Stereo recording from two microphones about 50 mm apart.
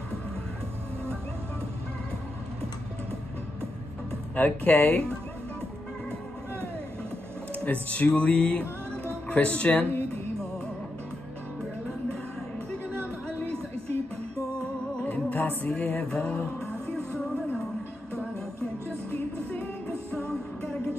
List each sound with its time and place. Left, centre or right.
4.4 s speech: left
7.5 s music: left
9.3 s speech: left
15.0 s music: left
15.3 s music: left
15.7 s speech: left